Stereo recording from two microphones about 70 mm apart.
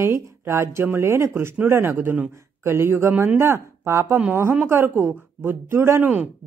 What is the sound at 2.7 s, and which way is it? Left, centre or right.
Speech, right.